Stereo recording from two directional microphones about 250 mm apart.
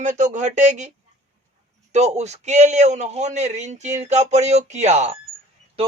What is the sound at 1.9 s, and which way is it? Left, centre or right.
Speech, right.